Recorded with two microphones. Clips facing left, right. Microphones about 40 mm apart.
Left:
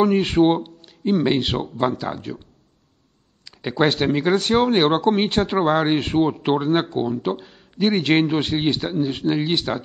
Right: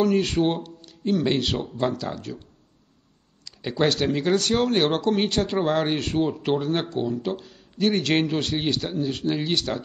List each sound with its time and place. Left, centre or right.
0.0 s speech: left
3.4 s speech: left